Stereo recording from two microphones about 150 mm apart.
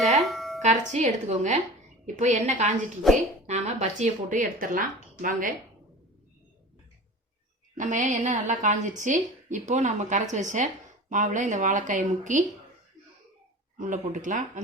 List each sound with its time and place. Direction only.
0.0 s a sound: centre (ahead or behind)
0.6 s a woman's voice: 50° right (ahead or behind)
4.6 s a woman's voice: 65° right (ahead or behind)
7.8 s a woman's voice: 55° right (ahead or behind)
13.7 s a woman's voice: 60° right (ahead or behind)